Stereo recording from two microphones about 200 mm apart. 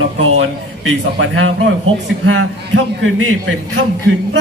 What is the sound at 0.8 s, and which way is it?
Speech, 85° right.